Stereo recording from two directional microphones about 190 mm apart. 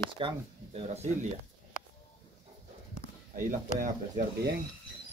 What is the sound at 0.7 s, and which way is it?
Speech, 35° right (ahead or behind).